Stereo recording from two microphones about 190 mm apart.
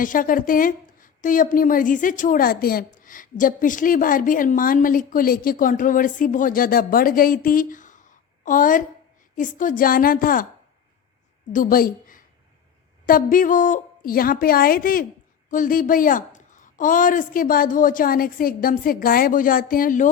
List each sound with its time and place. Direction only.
0.0 s a woman's voice: 45° left (ahead or behind)
11.5 s a woman's voice: 50° left (ahead or behind)